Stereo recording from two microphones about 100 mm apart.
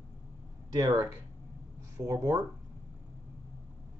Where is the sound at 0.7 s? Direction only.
40° right (ahead or behind).